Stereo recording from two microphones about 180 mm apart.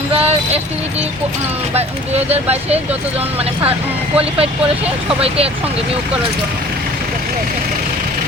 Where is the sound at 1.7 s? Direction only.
35° right (ahead or behind).